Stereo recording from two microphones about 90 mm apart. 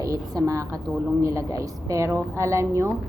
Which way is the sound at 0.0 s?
40° right (ahead or behind).